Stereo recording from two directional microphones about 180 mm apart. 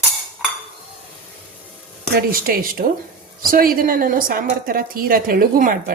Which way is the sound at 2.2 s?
55° right (ahead or behind).